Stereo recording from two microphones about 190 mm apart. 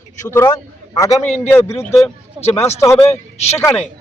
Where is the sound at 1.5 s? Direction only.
15° left (ahead or behind).